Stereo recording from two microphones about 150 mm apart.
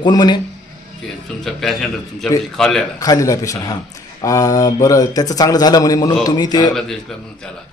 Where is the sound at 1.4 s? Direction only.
Centre (ahead or behind).